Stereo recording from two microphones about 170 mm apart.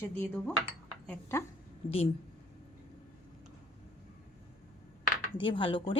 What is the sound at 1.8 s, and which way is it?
Speech, 35° left (ahead or behind).